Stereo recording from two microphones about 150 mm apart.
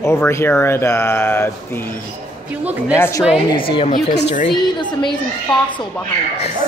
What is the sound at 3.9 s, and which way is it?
Speech, 55° left (ahead or behind).